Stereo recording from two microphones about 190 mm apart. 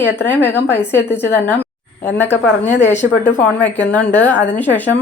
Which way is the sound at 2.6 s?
40° left (ahead or behind).